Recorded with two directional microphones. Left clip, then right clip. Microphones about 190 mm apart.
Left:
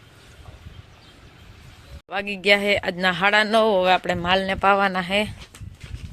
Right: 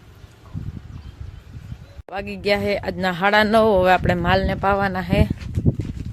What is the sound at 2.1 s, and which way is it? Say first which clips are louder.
Speech: left 3 dB; 5° right (ahead or behind).